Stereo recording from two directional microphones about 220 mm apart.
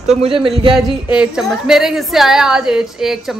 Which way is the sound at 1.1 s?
5° right (ahead or behind).